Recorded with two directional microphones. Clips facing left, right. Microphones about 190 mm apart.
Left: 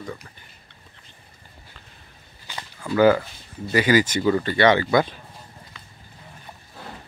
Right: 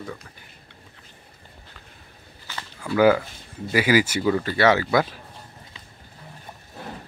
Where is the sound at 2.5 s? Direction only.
15° left (ahead or behind).